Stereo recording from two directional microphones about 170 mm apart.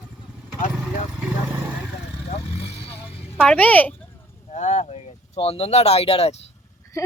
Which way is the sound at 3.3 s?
10° left (ahead or behind).